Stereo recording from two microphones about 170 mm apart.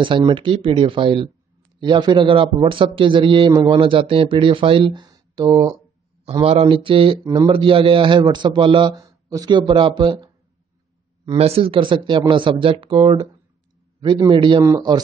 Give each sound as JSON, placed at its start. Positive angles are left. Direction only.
{"t": 0.0, "sound": "a man's voice", "side_deg": -30}